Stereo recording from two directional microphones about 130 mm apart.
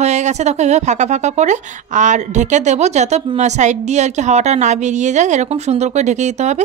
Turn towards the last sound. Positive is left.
turn(degrees=-60)  # may be behind; listen again after turning